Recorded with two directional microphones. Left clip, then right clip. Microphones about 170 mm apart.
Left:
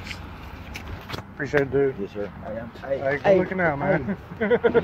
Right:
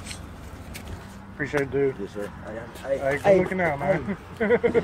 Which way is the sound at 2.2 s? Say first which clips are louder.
Left 2 dB; 45° left (ahead or behind).